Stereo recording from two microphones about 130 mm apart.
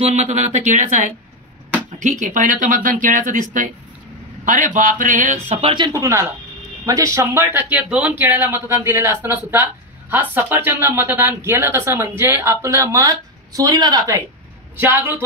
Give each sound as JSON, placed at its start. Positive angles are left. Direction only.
{"t": 0.0, "sound": "speech", "side_deg": -60}
{"t": 2.0, "sound": "speech", "side_deg": -70}
{"t": 5.5, "sound": "speech", "side_deg": -45}
{"t": 5.9, "sound": "speech", "side_deg": -25}
{"t": 14.8, "sound": "speech", "side_deg": -15}